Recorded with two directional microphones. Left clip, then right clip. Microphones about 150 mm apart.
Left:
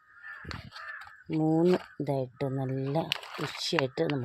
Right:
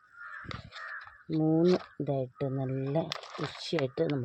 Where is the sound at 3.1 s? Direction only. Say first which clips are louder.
Left 2 dB; 15° right (ahead or behind).